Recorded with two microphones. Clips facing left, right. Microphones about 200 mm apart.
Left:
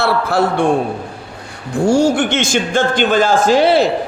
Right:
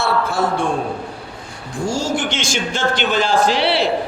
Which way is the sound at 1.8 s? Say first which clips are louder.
Left 8 dB; 60° left (ahead or behind).